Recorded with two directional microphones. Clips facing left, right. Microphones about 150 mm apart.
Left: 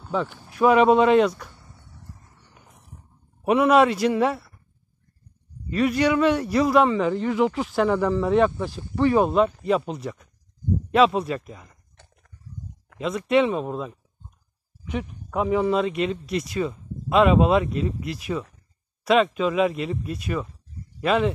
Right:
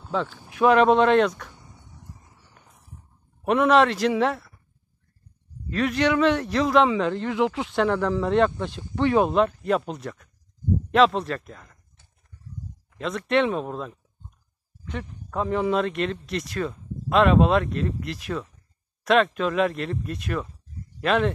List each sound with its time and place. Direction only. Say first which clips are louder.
0.0 s a man's voice: left 1 dB; 5° left (ahead or behind)
1.5 s a sound: right 1 dB; 15° right (ahead or behind)
2.4 s a sound: left 2 dB; centre (ahead or behind)
3.4 s a man's voice: left 1 dB; 5° left (ahead or behind)
5.7 s a man's voice: left 2 dB; 5° left (ahead or behind)
13.0 s a man's voice: left 2 dB; 5° left (ahead or behind)